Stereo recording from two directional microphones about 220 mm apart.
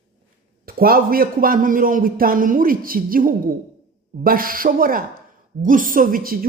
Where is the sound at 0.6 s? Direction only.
40° right (ahead or behind).